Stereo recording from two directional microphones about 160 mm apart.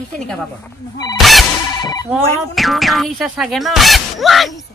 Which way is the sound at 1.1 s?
Centre (ahead or behind).